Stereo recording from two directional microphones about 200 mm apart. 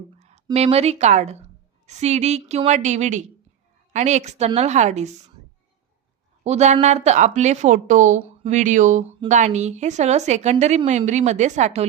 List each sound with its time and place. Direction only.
0.2 s a sound: 35° right (ahead or behind)
0.5 s a woman's voice: 30° right (ahead or behind)
6.4 s a woman's voice: 35° right (ahead or behind)